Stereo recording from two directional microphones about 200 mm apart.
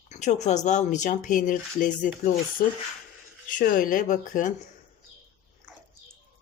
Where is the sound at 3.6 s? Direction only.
45° left (ahead or behind).